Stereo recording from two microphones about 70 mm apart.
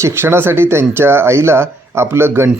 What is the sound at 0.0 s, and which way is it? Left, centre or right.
Speech, right.